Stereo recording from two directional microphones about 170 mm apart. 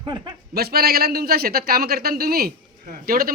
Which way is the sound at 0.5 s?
65° right (ahead or behind).